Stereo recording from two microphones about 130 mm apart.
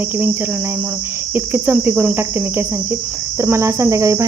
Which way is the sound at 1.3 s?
15° right (ahead or behind).